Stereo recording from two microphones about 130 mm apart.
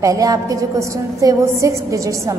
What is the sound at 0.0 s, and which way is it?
A woman's voice, 25° right (ahead or behind).